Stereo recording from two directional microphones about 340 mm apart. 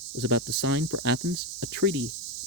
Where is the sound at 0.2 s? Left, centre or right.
Right.